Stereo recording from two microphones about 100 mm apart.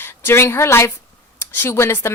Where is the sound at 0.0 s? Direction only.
25° left (ahead or behind).